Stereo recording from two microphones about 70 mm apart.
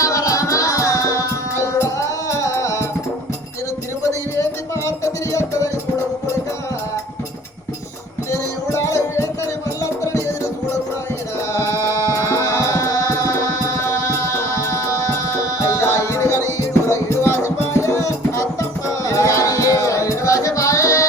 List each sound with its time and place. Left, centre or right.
0.0 s music: left
5.3 s music: left
8.3 s music: left
11.5 s music: left